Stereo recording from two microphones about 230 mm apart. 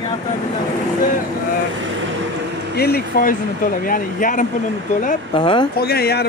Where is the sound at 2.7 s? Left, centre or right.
Left.